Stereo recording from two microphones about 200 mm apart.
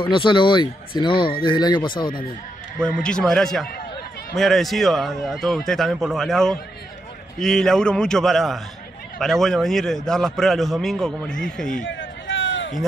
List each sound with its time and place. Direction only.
0.0 s speech: 25° left (ahead or behind)
2.8 s a man's voice: 5° left (ahead or behind)
11.8 s a sound: 70° left (ahead or behind)